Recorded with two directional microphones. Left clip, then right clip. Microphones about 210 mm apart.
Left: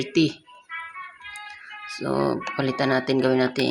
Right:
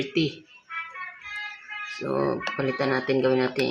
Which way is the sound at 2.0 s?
25° left (ahead or behind).